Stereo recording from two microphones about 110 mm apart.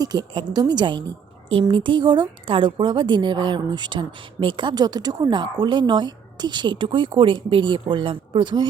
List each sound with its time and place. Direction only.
0.0 s a woman's voice: 40° right (ahead or behind)
1.5 s speech: 55° right (ahead or behind)